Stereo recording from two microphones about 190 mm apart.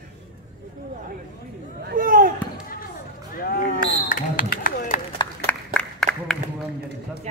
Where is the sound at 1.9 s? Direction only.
50° right (ahead or behind).